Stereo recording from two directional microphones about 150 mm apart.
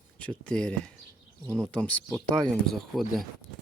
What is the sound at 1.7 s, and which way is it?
Speech, 10° left (ahead or behind).